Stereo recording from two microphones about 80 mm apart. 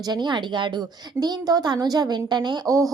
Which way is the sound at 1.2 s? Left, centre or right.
Right.